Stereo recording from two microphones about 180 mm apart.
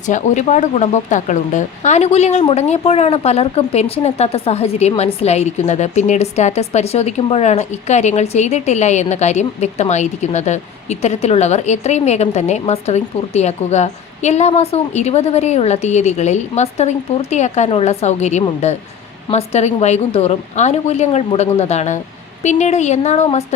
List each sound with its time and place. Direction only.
0.1 s speech: 40° left (ahead or behind)